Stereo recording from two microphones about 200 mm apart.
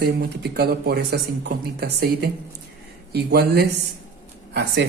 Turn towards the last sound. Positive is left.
turn(degrees=-55)  # may be behind; listen again after turning